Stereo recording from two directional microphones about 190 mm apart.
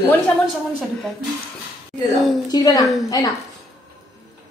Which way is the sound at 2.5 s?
20° left (ahead or behind).